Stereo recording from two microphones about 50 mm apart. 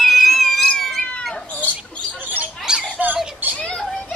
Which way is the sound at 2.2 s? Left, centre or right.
Right.